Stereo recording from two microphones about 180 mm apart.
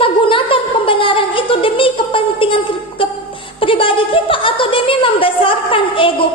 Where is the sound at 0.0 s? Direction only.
30° left (ahead or behind).